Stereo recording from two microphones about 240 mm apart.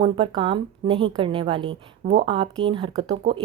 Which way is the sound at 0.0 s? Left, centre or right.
Right.